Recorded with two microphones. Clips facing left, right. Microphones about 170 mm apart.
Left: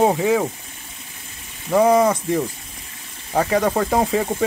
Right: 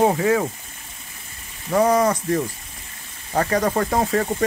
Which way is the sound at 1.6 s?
5° left (ahead or behind).